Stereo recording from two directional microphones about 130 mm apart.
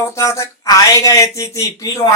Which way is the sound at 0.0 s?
25° left (ahead or behind).